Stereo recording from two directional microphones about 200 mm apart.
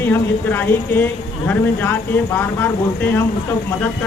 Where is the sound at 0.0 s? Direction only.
10° left (ahead or behind).